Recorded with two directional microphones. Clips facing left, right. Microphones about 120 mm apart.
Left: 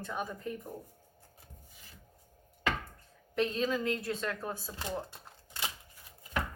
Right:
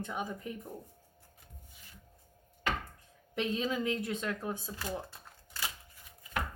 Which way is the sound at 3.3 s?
15° right (ahead or behind).